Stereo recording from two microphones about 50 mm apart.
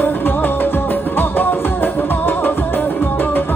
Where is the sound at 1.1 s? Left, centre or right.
Left.